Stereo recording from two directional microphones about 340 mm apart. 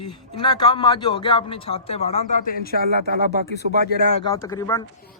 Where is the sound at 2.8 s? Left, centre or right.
Right.